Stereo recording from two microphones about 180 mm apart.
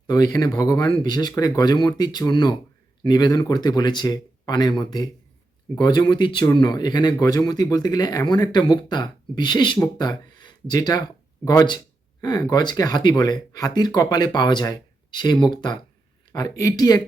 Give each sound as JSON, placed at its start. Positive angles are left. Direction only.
{"t": 0.1, "sound": "speech", "side_deg": 25}